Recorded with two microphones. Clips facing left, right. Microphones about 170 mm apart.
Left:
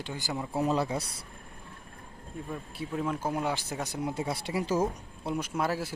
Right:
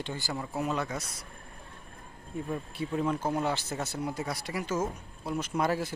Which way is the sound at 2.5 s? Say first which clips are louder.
Right 2 dB; centre (ahead or behind).